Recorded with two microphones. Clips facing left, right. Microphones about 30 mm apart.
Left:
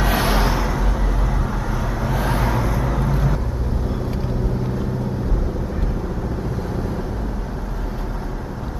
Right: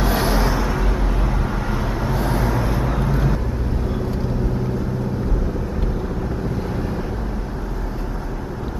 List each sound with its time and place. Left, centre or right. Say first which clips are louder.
0.1 s vehicle: even; left
2.2 s vehicle: even; centre
2.8 s vehicle: right 1 dB; centre